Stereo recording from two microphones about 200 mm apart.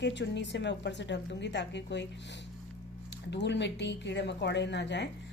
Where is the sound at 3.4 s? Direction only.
60° left (ahead or behind).